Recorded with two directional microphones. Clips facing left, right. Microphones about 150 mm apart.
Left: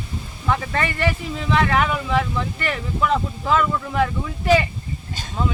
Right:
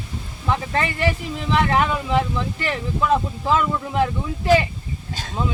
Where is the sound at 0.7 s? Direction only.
25° right (ahead or behind).